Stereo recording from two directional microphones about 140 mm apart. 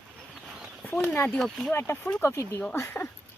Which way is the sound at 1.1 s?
15° left (ahead or behind).